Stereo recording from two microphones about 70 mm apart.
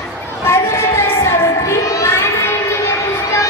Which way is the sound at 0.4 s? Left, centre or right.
Left.